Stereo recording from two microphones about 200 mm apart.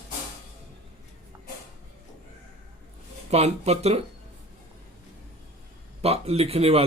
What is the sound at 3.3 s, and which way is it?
Speech, 30° right (ahead or behind).